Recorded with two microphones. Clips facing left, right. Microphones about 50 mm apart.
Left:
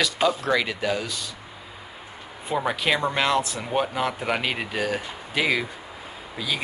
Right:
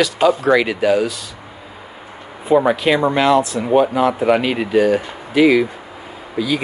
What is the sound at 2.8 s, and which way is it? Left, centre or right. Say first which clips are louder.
Speech: right 8 dB; centre.